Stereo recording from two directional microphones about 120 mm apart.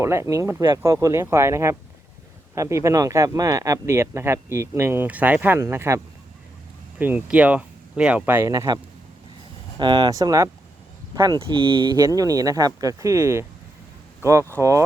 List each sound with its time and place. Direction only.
0.0 s speech: 25° right (ahead or behind)
7.0 s speech: 15° right (ahead or behind)
8.4 s speech: 30° right (ahead or behind)
9.7 s speech: 40° right (ahead or behind); by 14.8 s 25° right (ahead or behind)